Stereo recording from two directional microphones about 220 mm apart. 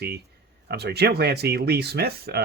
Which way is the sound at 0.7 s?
45° right (ahead or behind).